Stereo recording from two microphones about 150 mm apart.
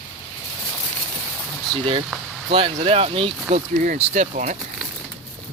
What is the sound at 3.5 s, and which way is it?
Speech, 55° right (ahead or behind).